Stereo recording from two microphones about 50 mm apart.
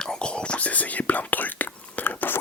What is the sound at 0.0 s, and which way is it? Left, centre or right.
Whispering, centre.